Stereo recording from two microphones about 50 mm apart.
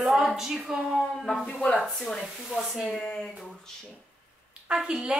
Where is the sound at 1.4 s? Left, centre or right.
Left.